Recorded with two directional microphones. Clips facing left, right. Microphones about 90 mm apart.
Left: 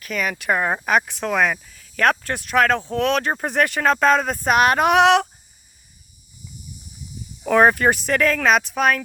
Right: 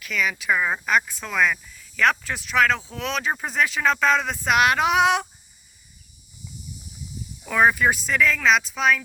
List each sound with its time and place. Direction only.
0.0 s speech: 45° left (ahead or behind)
0.9 s speech: 60° left (ahead or behind)
7.4 s speech: 50° left (ahead or behind)